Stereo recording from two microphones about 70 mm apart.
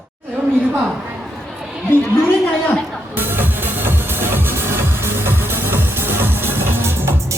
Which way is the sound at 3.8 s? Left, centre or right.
Right.